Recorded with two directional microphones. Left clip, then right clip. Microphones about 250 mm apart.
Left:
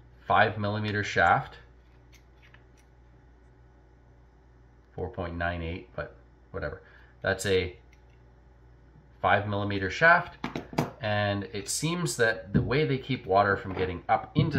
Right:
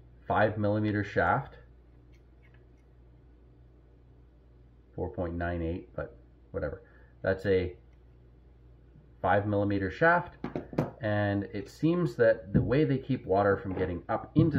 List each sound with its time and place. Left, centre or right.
0.2 s speech: left
5.1 s speech: left
7.2 s speech: left
9.2 s speech: left